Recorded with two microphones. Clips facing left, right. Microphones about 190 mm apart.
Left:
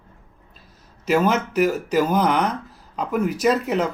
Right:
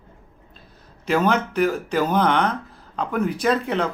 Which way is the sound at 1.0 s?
5° left (ahead or behind).